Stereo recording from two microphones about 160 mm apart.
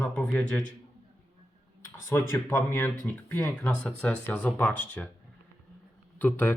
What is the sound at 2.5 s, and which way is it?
Speech, 15° left (ahead or behind).